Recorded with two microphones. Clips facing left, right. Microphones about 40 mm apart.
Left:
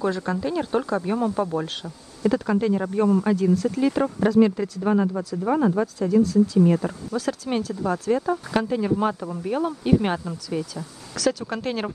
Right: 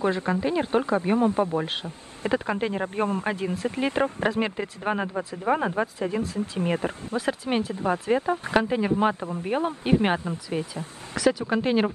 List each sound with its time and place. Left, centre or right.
0.0 s speech: right